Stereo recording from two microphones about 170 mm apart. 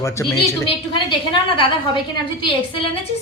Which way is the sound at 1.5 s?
30° left (ahead or behind).